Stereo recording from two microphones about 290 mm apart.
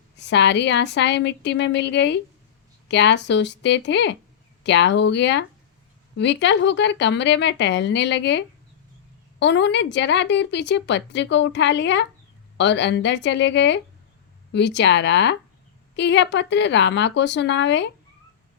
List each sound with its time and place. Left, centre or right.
0.2 s speech: left